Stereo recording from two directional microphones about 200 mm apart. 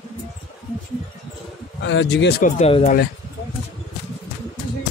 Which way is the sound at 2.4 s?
30° left (ahead or behind).